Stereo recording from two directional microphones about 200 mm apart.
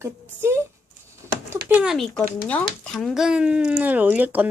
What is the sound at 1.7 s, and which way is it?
Speech, centre (ahead or behind).